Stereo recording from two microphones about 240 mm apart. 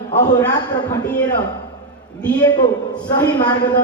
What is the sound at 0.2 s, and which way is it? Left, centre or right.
Speech, centre.